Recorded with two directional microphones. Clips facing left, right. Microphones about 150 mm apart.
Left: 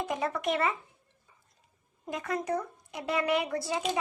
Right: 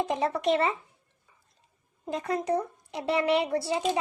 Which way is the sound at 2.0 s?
30° right (ahead or behind).